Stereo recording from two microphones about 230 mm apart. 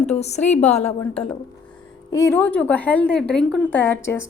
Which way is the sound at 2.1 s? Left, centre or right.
Centre.